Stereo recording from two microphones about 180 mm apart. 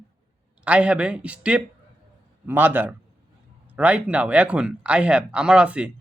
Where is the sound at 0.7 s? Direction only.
5° right (ahead or behind).